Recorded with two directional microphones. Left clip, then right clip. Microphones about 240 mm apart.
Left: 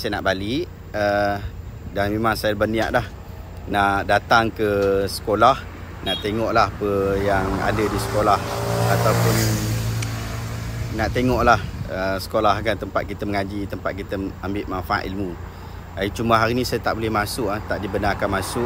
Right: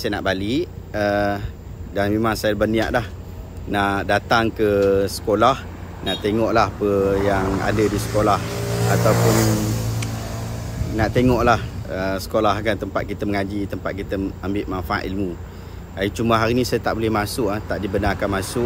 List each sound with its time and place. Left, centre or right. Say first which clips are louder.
0.0 s speech: even; centre
7.7 s speech: right 2 dB; centre
9.2 s speech: right 3 dB; right
11.0 s speech: right 2 dB; centre